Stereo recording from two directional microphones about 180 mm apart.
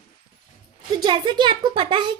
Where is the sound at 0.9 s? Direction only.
25° right (ahead or behind).